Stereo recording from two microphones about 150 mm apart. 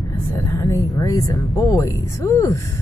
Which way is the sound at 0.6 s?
20° left (ahead or behind).